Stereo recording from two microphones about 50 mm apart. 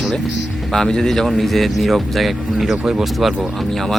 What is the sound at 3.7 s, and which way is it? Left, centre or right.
Speech, centre.